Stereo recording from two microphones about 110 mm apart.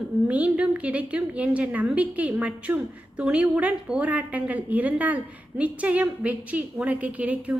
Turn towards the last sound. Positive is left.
turn(degrees=-15)  # may be behind; listen again after turning